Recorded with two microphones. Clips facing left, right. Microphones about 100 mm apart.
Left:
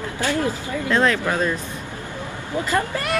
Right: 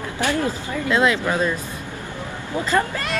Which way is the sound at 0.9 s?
10° right (ahead or behind).